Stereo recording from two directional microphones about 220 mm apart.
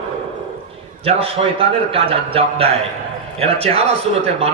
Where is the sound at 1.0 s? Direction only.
25° right (ahead or behind).